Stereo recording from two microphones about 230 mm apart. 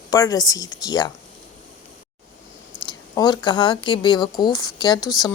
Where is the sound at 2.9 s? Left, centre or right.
Centre.